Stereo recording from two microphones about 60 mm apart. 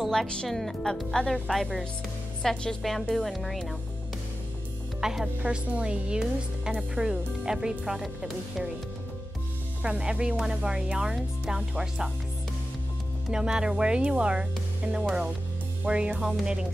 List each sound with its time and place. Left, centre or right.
0.1 s speech: centre
2.5 s speech: centre
5.0 s a woman's voice: centre
5.4 s a woman's voice: right
9.8 s a woman's voice: centre
13.3 s a woman's voice: centre
16.2 s a woman's voice: centre